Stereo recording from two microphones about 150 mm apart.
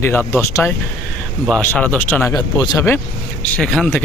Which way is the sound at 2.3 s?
30° left (ahead or behind).